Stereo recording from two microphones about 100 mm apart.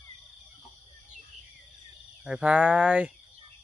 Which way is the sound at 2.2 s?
10° right (ahead or behind).